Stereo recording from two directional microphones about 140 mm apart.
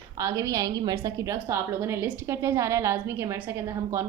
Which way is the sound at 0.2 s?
25° right (ahead or behind).